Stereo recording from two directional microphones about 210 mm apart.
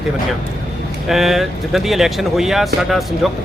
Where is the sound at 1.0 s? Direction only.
Centre (ahead or behind).